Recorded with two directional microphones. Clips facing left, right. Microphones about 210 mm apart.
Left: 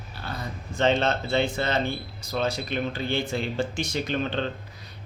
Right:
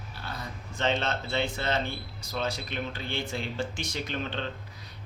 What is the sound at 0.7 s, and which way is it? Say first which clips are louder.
Speech: left 6 dB; 40° left (ahead or behind).